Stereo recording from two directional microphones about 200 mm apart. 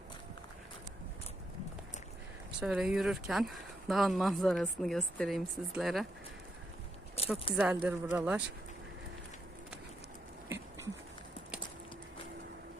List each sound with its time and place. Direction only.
2.6 s speech: 5° right (ahead or behind)
7.2 s a sound: 30° left (ahead or behind)
7.5 s speech: 5° right (ahead or behind)